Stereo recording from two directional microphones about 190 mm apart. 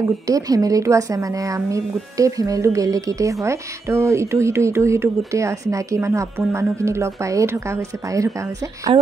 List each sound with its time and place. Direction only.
0.3 s a woman's voice: 20° right (ahead or behind)